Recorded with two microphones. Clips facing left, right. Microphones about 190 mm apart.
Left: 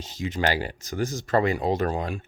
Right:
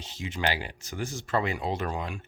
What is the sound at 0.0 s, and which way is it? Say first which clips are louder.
Speech: left 5 dB; 40° left (ahead or behind).